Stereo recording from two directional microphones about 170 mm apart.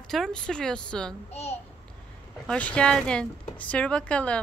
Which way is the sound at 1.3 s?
40° left (ahead or behind).